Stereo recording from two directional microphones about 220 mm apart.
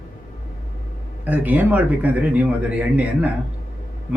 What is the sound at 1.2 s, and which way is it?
Speech, 5° right (ahead or behind).